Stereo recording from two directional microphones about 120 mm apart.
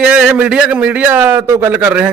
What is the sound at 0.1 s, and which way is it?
A man's voice, 10° right (ahead or behind).